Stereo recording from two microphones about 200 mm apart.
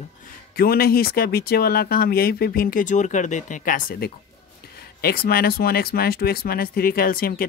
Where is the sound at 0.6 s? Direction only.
50° left (ahead or behind).